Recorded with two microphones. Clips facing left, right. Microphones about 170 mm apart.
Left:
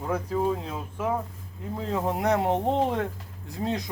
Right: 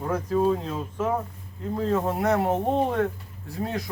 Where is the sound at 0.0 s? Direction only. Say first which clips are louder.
Right 3 dB; 15° left (ahead or behind).